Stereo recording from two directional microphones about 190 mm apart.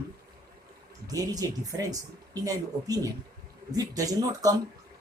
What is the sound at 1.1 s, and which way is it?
Speech, 20° right (ahead or behind).